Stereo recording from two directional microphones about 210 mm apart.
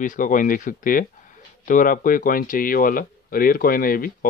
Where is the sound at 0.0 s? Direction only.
40° left (ahead or behind).